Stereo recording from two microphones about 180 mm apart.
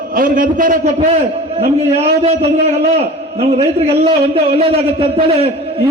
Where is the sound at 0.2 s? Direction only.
50° right (ahead or behind).